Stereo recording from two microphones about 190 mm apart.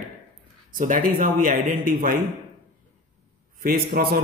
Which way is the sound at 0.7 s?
45° right (ahead or behind).